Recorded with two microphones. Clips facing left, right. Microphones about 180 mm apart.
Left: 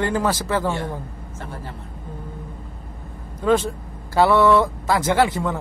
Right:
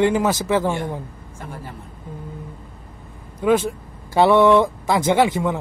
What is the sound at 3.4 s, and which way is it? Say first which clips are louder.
Speech: right 1 dB; 10° right (ahead or behind).